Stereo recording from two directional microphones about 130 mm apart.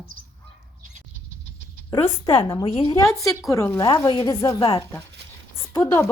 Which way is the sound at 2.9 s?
25° left (ahead or behind).